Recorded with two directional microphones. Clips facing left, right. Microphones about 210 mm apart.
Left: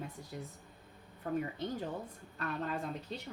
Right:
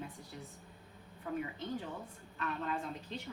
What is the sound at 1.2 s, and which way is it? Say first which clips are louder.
A woman's voice: left 3 dB; 40° left (ahead or behind).